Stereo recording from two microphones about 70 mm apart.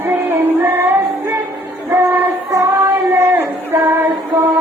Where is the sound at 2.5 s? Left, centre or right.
Right.